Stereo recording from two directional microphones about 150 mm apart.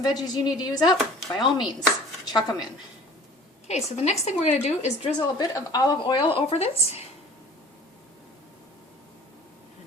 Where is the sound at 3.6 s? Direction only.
45° left (ahead or behind).